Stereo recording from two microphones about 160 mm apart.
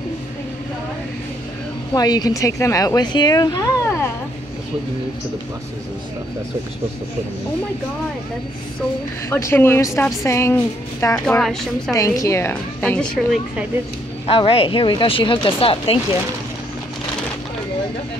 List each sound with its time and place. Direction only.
2.0 s speech: 25° left (ahead or behind)
9.3 s a woman's voice: 15° left (ahead or behind)
11.2 s a woman's voice: 5° left (ahead or behind)
11.9 s a woman's voice: 20° left (ahead or behind); by 13.4 s 5° left (ahead or behind)
14.2 s speech: 35° left (ahead or behind)